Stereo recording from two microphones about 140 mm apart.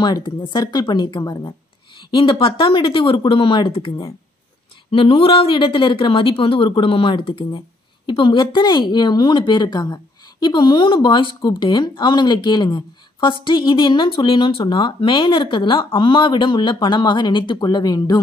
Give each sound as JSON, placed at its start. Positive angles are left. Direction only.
{"t": 0.0, "sound": "speech", "side_deg": 30}